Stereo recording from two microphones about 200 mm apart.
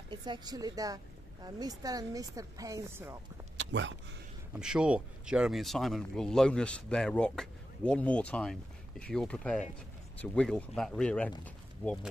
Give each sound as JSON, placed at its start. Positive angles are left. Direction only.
{"t": 0.1, "sound": "speech", "side_deg": -20}
{"t": 3.5, "sound": "a sound", "side_deg": -65}
{"t": 4.6, "sound": "speech", "side_deg": -5}